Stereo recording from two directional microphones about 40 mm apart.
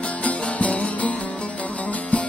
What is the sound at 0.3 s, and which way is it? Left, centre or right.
Music, left.